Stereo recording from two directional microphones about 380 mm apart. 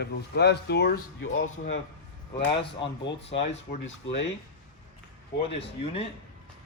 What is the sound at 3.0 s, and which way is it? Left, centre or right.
Speech, left.